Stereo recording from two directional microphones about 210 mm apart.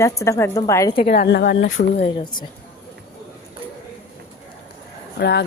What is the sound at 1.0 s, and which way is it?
Speech, 50° left (ahead or behind).